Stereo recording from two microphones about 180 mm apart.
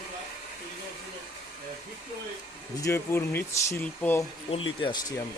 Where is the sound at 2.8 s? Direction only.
15° left (ahead or behind).